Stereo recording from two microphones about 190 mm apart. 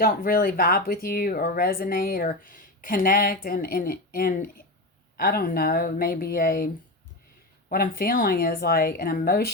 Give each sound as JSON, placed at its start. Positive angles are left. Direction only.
{"t": 0.0, "sound": "speech", "side_deg": 50}
{"t": 7.7, "sound": "speech", "side_deg": 50}